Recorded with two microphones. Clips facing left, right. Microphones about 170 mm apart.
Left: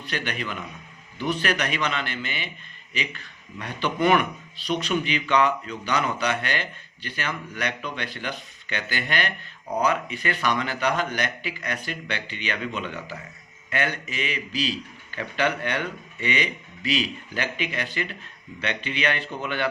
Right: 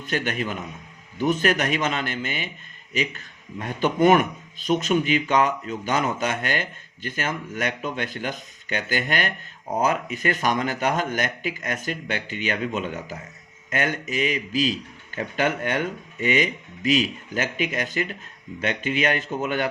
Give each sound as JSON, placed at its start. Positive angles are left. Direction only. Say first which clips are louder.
{"t": 0.0, "sound": "a man's voice", "louder": "right 4 dB", "side_deg": -45}